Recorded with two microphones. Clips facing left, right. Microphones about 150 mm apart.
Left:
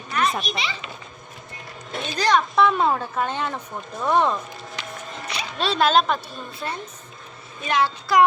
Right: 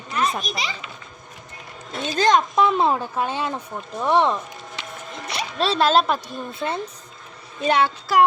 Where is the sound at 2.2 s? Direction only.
20° right (ahead or behind).